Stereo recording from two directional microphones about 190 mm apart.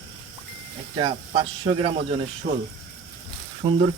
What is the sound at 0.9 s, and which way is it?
Speech, 25° right (ahead or behind).